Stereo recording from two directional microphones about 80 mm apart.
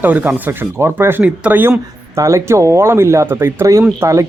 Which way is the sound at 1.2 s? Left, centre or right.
Centre.